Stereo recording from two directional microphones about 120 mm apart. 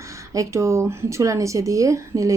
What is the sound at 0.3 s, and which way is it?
Speech, 25° right (ahead or behind).